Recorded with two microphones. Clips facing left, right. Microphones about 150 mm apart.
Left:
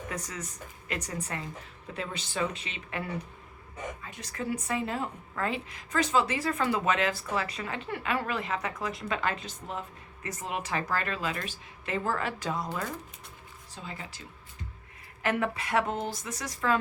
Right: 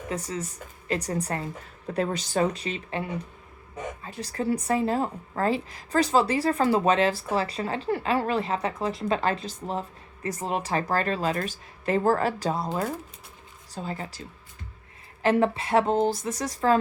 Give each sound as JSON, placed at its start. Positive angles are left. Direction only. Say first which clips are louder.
{"t": 0.1, "sound": "a woman's voice", "louder": "right 10 dB", "side_deg": -30}
{"t": 4.0, "sound": "a woman's voice", "louder": "right 9 dB", "side_deg": -35}
{"t": 13.7, "sound": "a woman's voice", "louder": "right 8 dB", "side_deg": -40}
{"t": 15.2, "sound": "a woman's voice", "louder": "right 7 dB", "side_deg": -30}